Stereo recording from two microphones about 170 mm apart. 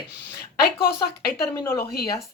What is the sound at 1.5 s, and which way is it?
Speech, 20° left (ahead or behind).